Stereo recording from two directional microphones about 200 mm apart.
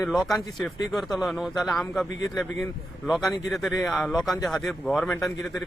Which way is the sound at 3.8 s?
5° left (ahead or behind).